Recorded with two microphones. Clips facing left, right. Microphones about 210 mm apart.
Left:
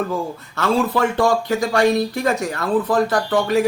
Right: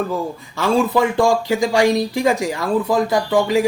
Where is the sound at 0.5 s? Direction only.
15° right (ahead or behind).